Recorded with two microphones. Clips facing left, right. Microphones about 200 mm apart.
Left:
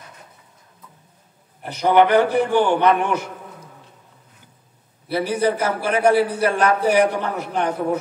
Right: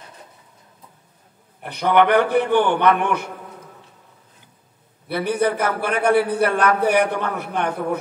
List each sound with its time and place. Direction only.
1.6 s a sound: 60° right (ahead or behind)
2.0 s a man's voice: 60° right (ahead or behind)
5.0 s a man's voice: 55° right (ahead or behind)